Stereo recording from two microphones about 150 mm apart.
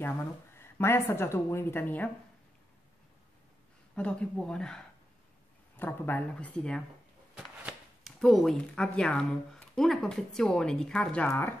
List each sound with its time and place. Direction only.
0.6 s a woman's voice: 15° left (ahead or behind)
3.9 s a woman's voice: 10° left (ahead or behind)
7.3 s speech: 5° right (ahead or behind)
11.2 s a woman's voice: 15° left (ahead or behind)